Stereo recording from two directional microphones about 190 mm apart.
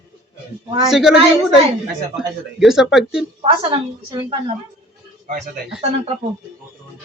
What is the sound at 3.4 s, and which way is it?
A woman's voice, 25° right (ahead or behind).